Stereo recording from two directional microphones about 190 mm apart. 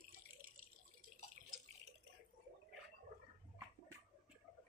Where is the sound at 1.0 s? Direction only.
40° right (ahead or behind).